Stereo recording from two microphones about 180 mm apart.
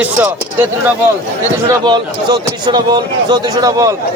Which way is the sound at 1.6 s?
20° right (ahead or behind).